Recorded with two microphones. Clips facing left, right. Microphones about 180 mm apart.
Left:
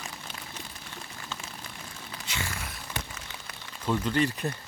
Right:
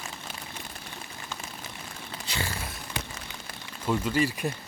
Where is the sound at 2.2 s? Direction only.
35° right (ahead or behind).